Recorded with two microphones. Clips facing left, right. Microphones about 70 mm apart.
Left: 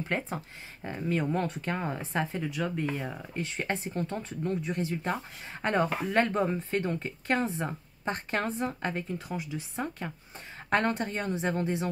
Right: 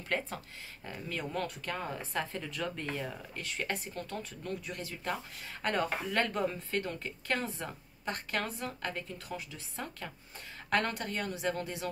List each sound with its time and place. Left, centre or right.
0.0 s speech: left
2.3 s speech: centre